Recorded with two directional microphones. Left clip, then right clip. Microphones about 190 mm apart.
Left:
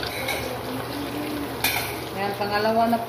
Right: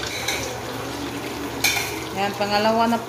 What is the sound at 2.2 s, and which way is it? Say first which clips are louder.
Speech: right 3 dB; 60° right (ahead or behind).